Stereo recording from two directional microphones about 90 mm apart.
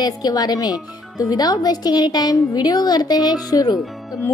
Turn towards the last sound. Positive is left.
turn(degrees=45)  # may be behind; listen again after turning